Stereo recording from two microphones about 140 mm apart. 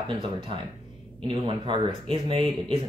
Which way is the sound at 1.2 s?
35° right (ahead or behind).